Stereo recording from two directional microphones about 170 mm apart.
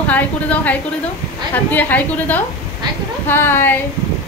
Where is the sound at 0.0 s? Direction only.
10° left (ahead or behind).